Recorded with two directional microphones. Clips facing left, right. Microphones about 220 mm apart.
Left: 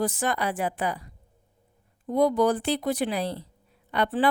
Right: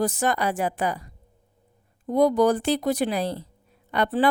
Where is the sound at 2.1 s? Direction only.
40° right (ahead or behind).